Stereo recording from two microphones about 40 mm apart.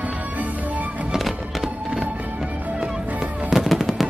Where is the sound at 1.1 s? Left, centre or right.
Centre.